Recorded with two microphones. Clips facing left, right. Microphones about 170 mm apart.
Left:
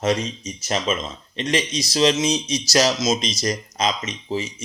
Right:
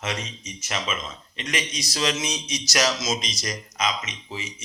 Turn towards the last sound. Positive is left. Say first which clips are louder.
# left 9 dB
turn(degrees=35)  # may be behind; listen again after turning